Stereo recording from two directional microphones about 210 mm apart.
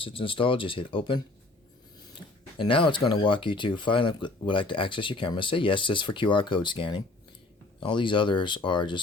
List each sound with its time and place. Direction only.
0.0 s speech: 25° left (ahead or behind)
2.6 s speech: 25° left (ahead or behind)